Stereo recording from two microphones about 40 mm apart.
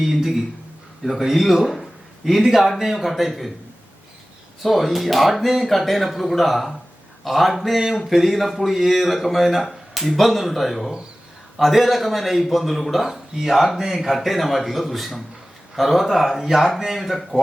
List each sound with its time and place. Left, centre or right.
0.0 s a man's voice: centre
4.6 s a man's voice: centre